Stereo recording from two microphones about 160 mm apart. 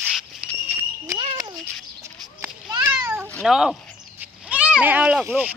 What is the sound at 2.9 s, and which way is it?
Cat, 15° right (ahead or behind).